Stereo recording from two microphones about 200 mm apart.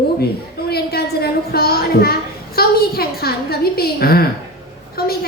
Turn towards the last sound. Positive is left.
turn(degrees=50)  # may be behind; listen again after turning